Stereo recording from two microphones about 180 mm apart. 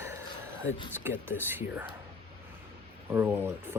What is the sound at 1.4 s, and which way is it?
Speech, 10° right (ahead or behind).